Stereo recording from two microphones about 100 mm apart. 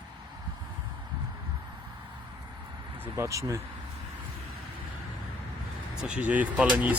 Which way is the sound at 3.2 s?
30° right (ahead or behind).